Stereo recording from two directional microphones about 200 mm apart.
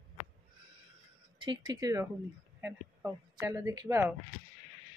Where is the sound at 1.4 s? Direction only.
25° right (ahead or behind).